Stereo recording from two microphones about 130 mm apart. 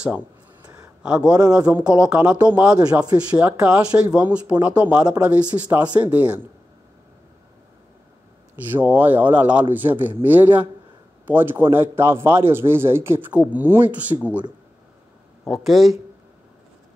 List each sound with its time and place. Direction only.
0.7 s a sound: 10° right (ahead or behind)
1.9 s a man's voice: 10° right (ahead or behind)
8.5 s a man's voice: 15° right (ahead or behind)
15.4 s speech: centre (ahead or behind)